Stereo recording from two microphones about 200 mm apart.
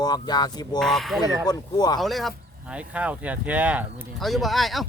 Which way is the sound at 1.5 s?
20° left (ahead or behind).